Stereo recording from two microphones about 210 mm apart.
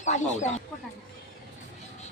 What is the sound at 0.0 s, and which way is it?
Speech, 35° left (ahead or behind).